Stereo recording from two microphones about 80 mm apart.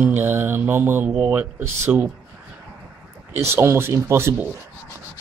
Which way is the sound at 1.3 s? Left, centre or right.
Right.